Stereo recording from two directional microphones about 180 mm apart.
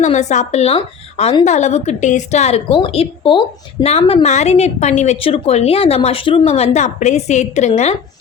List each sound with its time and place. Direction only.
0.0 s a woman's voice: 40° left (ahead or behind)